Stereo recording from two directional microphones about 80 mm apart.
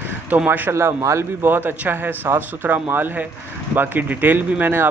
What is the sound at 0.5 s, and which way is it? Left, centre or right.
A man's voice, right.